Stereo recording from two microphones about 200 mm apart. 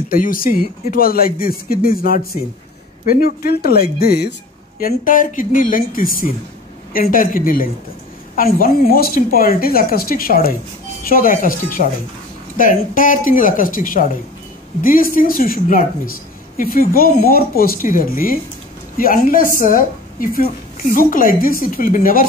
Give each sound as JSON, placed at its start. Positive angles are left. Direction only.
{"t": 0.1, "sound": "a woman's voice", "side_deg": 45}